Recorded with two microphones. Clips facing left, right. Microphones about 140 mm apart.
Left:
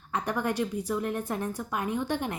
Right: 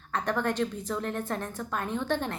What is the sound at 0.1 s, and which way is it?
A woman's voice, 10° left (ahead or behind).